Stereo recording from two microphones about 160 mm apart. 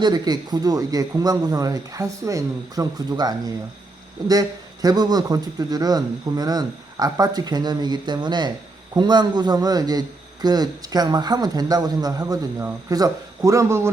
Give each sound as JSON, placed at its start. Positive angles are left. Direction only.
{"t": 0.0, "sound": "a man's voice", "side_deg": -25}